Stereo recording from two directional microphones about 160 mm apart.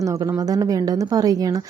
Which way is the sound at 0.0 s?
20° right (ahead or behind).